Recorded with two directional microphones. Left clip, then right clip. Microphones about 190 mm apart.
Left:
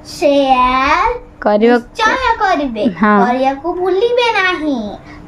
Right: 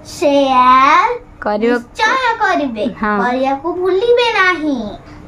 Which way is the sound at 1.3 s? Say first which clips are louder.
Left 7 dB; 20° left (ahead or behind).